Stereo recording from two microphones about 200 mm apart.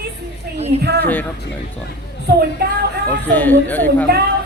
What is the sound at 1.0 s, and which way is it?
Speech, 10° left (ahead or behind).